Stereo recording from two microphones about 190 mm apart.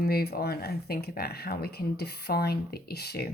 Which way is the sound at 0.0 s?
55° left (ahead or behind).